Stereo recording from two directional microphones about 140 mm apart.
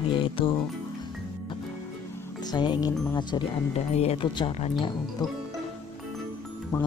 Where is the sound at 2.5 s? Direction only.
30° left (ahead or behind).